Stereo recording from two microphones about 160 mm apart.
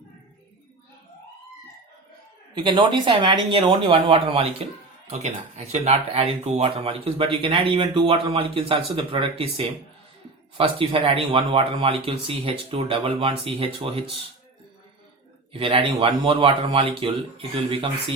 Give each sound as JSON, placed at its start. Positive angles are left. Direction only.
{"t": 2.6, "sound": "speech", "side_deg": -30}
{"t": 5.0, "sound": "speech", "side_deg": -45}
{"t": 10.6, "sound": "speech", "side_deg": -35}
{"t": 15.5, "sound": "speech", "side_deg": -35}